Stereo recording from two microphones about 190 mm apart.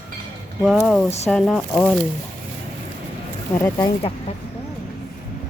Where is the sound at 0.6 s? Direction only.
Centre (ahead or behind).